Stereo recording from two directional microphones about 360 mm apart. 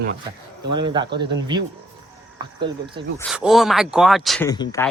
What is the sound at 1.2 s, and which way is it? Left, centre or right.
Speech, centre.